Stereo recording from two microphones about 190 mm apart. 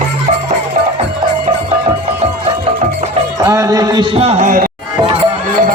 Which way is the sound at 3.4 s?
20° right (ahead or behind).